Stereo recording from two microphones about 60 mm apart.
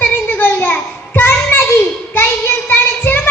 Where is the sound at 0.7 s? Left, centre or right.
Left.